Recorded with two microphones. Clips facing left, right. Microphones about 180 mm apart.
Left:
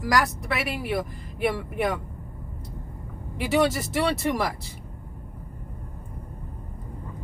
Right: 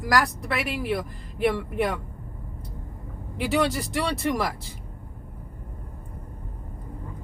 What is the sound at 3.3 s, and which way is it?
Speech, 5° left (ahead or behind).